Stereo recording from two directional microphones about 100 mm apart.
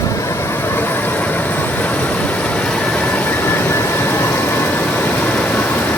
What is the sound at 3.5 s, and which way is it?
Vehicle, 25° left (ahead or behind).